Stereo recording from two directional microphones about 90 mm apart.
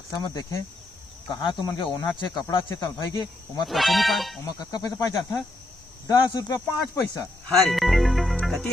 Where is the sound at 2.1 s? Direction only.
50° left (ahead or behind).